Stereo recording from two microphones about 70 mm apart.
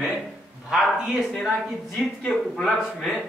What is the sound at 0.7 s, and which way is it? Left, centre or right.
Speech, centre.